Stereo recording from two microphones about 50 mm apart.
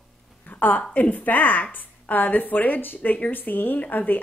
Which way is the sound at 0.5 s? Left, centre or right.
Left.